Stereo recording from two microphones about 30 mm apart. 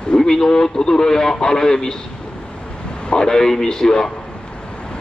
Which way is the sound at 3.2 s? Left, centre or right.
Centre.